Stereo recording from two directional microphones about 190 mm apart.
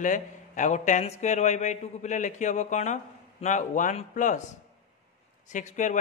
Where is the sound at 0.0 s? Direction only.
40° left (ahead or behind).